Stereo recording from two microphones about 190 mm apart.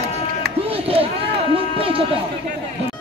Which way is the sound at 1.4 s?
30° right (ahead or behind).